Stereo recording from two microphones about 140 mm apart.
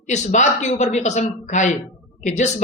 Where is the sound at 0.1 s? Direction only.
60° left (ahead or behind).